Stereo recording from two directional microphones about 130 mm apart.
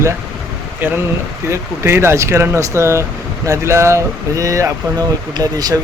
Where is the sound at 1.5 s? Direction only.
20° right (ahead or behind).